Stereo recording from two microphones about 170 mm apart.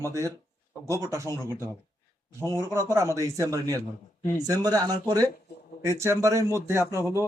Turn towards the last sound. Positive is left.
turn(degrees=-15)  # may be behind; listen again after turning